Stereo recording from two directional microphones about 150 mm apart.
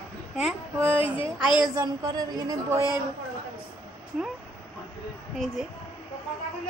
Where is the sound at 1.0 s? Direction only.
35° left (ahead or behind).